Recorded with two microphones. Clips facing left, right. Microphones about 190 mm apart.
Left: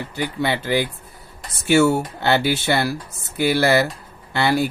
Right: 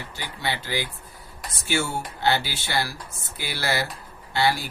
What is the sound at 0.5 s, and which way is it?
Speech, 60° left (ahead or behind).